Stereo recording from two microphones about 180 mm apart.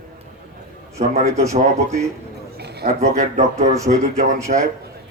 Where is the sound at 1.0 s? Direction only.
40° right (ahead or behind).